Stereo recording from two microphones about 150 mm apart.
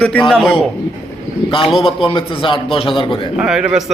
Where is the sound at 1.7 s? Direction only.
35° left (ahead or behind).